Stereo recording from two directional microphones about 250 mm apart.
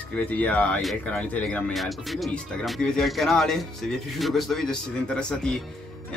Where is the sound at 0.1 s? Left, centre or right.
Centre.